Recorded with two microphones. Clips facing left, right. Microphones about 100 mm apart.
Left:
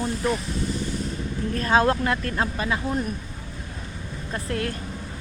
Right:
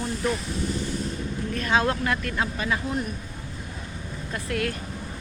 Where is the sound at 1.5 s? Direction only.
35° left (ahead or behind).